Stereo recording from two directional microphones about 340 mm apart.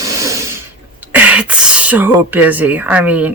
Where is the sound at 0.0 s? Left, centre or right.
Centre.